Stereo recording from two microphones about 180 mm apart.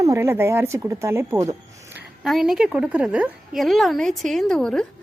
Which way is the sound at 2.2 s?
Centre (ahead or behind).